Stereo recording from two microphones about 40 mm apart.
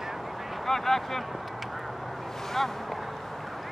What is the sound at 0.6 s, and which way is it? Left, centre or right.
Speech, centre.